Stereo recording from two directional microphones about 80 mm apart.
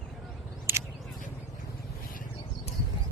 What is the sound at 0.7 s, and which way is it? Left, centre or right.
Single-lens reflex camera, right.